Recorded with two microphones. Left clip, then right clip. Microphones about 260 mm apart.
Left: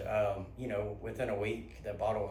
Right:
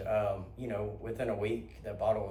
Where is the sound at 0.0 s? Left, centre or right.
Centre.